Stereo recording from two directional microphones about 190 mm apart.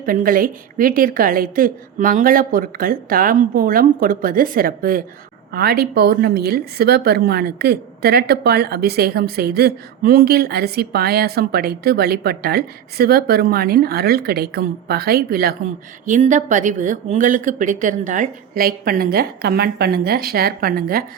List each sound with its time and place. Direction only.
0.0 s a woman's voice: 50° right (ahead or behind)